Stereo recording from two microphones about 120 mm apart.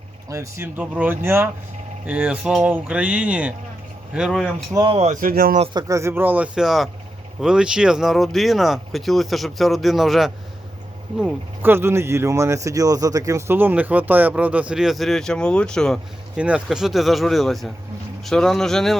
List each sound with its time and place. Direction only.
0.3 s speech: 25° right (ahead or behind)
0.8 s speech: 15° right (ahead or behind)
4.7 s speech: 35° right (ahead or behind); by 10.3 s centre (ahead or behind)
11.6 s speech: 20° right (ahead or behind); by 16.0 s 5° left (ahead or behind)
16.4 s speech: 10° right (ahead or behind)